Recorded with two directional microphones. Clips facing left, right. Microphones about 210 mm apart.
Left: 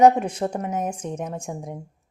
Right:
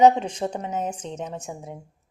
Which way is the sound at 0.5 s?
10° left (ahead or behind).